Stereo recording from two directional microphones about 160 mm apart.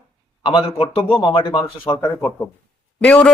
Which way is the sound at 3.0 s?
10° left (ahead or behind).